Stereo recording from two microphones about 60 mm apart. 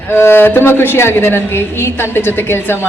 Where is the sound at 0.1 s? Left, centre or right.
Left.